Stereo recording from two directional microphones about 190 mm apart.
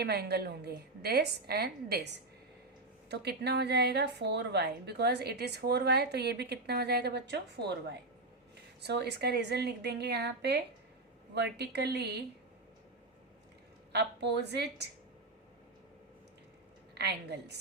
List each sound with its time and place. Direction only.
0.0 s a woman's voice: 60° right (ahead or behind)
13.9 s a woman's voice: 60° right (ahead or behind)
16.9 s a woman's voice: 60° right (ahead or behind)